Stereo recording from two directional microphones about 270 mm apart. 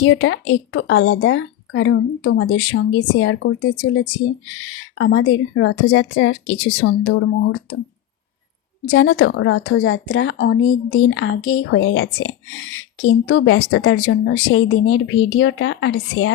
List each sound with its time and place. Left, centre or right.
0.0 s a woman's voice: left
8.9 s a woman's voice: left